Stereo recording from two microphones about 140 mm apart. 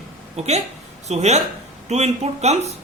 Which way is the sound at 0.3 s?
50° right (ahead or behind).